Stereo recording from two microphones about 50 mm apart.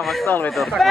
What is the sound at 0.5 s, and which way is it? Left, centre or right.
Speech, centre.